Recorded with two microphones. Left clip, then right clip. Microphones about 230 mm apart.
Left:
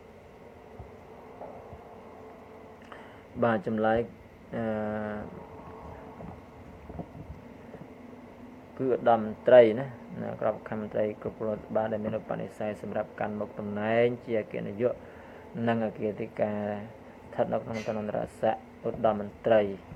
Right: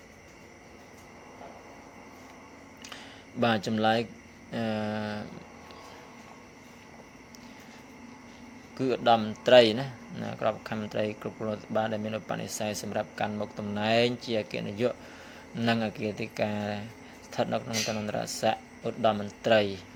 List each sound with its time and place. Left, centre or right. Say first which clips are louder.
3.4 s speech: even; right
8.8 s speech: even; right